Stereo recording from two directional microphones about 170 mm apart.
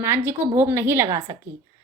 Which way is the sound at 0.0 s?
15° right (ahead or behind).